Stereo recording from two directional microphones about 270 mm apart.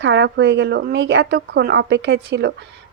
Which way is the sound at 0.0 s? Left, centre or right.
Right.